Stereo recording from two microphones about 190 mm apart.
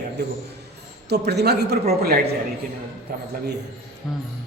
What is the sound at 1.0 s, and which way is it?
A man's voice, 60° right (ahead or behind).